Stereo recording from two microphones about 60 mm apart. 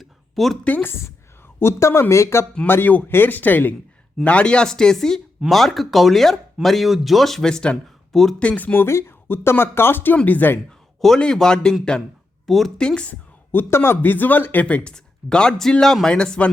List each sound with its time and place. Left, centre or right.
0.0 s a sound: centre
0.6 s speech: left
0.9 s speech: left
4.2 s speech: centre
8.1 s speech: centre
8.4 s speech: left
8.9 s speech: left
11.2 s speech: centre
12.5 s speech: centre
12.7 s speech: centre
13.5 s speech: left; by 16.5 s centre